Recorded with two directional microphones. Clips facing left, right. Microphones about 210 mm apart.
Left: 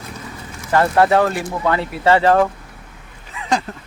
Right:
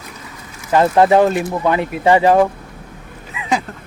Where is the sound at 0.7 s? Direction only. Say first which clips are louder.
Right 3 dB; 20° right (ahead or behind).